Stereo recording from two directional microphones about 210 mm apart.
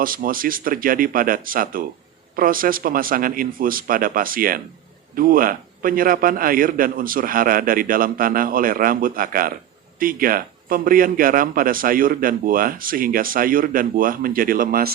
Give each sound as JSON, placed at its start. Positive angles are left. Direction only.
{"t": 0.0, "sound": "a man's voice", "side_deg": -45}